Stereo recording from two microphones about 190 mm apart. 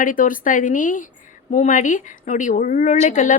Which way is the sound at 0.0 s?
45° left (ahead or behind).